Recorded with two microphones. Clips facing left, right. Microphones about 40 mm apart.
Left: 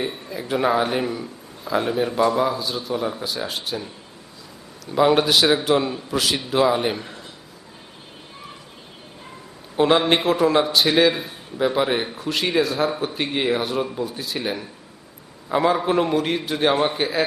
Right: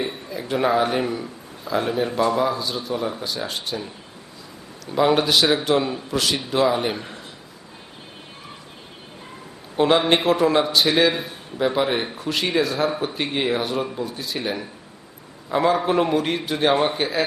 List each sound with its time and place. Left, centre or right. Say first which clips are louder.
0.0 s a sound: even; centre
1.7 s speech: left 1 dB; centre
4.9 s speech: left 1 dB; centre
9.7 s speech: even; centre